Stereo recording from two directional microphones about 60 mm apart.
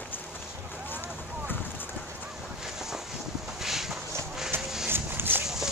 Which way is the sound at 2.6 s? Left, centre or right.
Centre.